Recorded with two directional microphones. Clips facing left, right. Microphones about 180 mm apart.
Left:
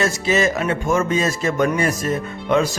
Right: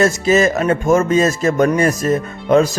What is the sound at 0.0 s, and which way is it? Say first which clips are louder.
Speech: right 5 dB; 45° right (ahead or behind).